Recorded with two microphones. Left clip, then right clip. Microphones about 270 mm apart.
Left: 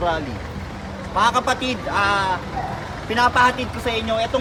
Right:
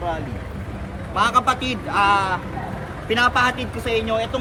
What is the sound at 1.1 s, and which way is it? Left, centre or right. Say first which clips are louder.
Speech: even; centre.